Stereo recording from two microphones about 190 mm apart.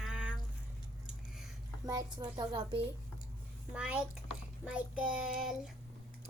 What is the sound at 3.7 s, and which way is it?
Speech, 5° right (ahead or behind).